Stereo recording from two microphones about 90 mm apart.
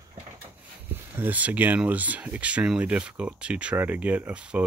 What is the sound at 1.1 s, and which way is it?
Speech, 20° right (ahead or behind).